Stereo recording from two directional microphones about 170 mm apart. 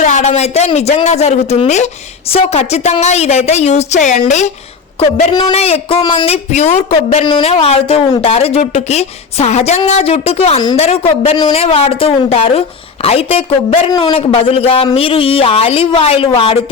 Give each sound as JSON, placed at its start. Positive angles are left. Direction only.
{"t": 0.0, "sound": "speech", "side_deg": 45}